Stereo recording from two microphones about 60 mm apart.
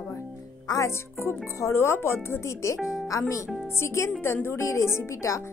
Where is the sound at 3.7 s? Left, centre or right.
Left.